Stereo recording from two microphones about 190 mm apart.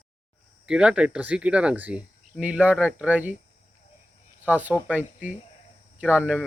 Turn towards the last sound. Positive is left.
turn(degrees=-5)  # may be behind; listen again after turning